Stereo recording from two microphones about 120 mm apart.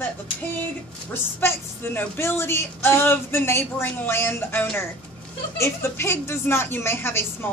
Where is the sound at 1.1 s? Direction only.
20° left (ahead or behind).